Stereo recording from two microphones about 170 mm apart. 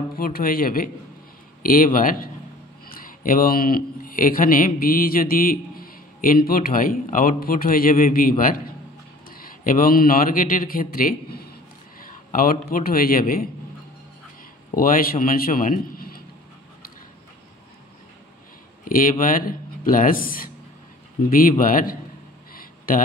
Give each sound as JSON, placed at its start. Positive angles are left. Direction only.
{"t": 0.2, "sound": "speech", "side_deg": 60}
{"t": 14.7, "sound": "a man's voice", "side_deg": 55}
{"t": 18.9, "sound": "speech", "side_deg": 55}